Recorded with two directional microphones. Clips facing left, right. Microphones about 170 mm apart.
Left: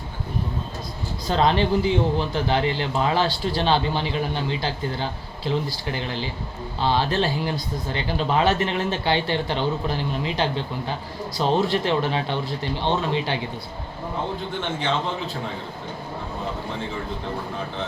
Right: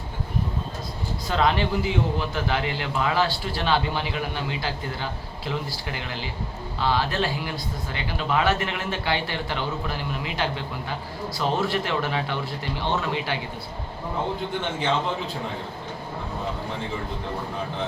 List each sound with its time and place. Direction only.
1.3 s speech: 30° left (ahead or behind)